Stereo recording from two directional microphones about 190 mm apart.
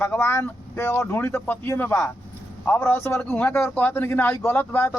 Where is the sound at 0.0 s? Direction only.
10° left (ahead or behind).